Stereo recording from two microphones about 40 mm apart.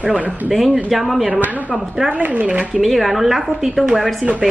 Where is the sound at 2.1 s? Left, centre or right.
Right.